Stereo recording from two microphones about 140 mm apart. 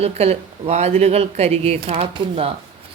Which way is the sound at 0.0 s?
45° right (ahead or behind).